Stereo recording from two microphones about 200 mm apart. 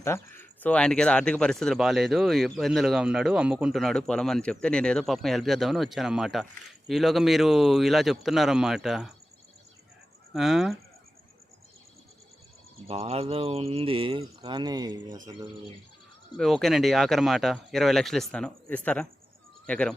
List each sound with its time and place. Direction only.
0.0 s speech: 10° left (ahead or behind)
10.3 s speech: centre (ahead or behind)
12.9 s speech: 30° right (ahead or behind)
16.4 s speech: centre (ahead or behind)